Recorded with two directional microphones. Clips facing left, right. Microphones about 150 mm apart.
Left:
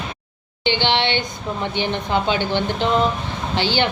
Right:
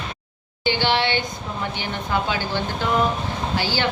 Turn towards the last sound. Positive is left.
turn(degrees=25)  # may be behind; listen again after turning